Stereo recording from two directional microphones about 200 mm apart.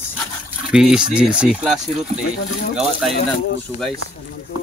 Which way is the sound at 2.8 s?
Centre (ahead or behind).